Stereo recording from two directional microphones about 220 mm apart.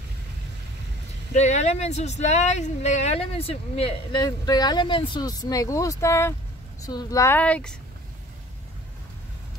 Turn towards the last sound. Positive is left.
turn(degrees=5)  # may be behind; listen again after turning